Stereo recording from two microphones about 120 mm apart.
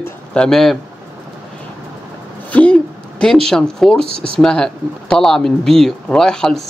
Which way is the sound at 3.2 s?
5° left (ahead or behind).